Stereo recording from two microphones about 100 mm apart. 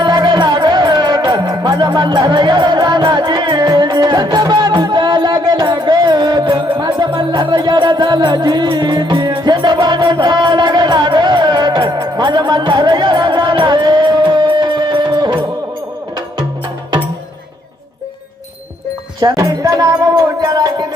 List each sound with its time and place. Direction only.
0.0 s music: 50° right (ahead or behind)
19.4 s music: 35° right (ahead or behind)